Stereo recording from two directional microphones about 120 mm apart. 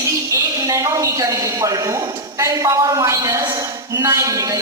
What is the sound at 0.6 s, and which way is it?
A man's voice, 30° right (ahead or behind).